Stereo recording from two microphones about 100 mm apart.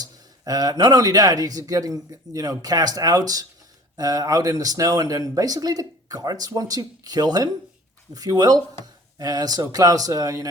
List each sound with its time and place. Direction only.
0.0 s speech: 40° right (ahead or behind)